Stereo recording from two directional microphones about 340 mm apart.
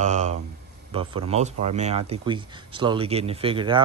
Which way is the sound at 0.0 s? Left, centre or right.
Centre.